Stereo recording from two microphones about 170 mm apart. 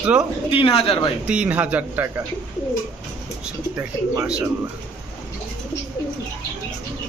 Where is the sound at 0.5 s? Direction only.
35° left (ahead or behind).